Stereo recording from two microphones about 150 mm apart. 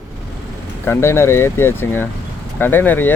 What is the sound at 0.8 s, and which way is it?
Speech, 15° left (ahead or behind).